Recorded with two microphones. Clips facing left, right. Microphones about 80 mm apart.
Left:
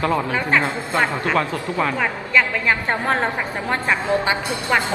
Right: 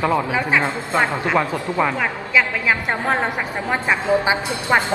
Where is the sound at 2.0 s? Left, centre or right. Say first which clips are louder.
Even; centre.